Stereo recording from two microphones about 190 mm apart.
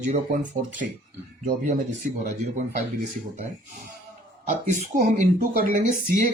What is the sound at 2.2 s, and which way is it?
Speech, 40° right (ahead or behind).